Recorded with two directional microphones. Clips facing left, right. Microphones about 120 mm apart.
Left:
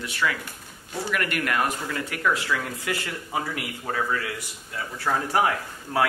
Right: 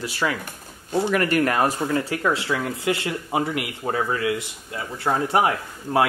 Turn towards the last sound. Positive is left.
turn(degrees=-25)  # may be behind; listen again after turning